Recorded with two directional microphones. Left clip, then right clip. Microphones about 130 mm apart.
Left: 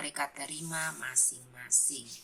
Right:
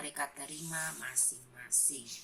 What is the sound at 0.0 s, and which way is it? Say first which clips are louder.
Speech: left 4 dB; 40° left (ahead or behind).